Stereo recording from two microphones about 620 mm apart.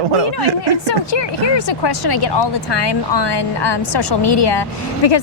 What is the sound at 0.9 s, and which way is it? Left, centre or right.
A woman's voice, left.